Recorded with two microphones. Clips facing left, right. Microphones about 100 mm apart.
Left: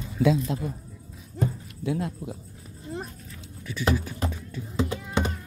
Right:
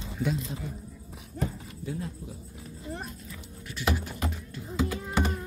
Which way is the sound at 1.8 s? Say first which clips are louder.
Left 8 dB; 70° left (ahead or behind).